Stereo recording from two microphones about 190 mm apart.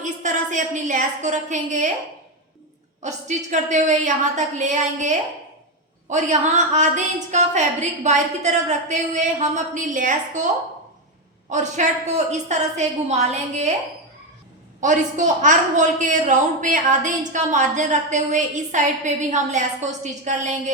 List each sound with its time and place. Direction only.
0.0 s a woman's voice: 40° right (ahead or behind)
3.0 s a woman's voice: 40° right (ahead or behind)
14.8 s a woman's voice: 40° right (ahead or behind)